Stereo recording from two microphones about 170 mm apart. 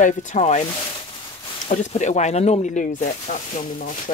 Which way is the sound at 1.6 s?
40° left (ahead or behind).